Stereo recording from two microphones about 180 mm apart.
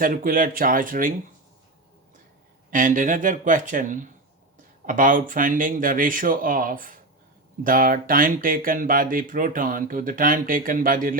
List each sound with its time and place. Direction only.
0.0 s speech: 50° right (ahead or behind)
2.6 s speech: 45° right (ahead or behind)